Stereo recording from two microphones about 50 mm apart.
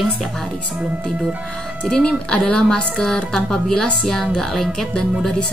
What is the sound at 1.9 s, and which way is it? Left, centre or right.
Speech, centre.